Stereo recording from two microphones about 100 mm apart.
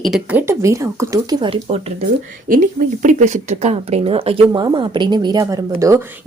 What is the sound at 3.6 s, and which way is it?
Speech, 80° right.